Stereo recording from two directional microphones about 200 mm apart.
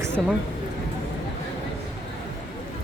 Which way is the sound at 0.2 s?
Centre (ahead or behind).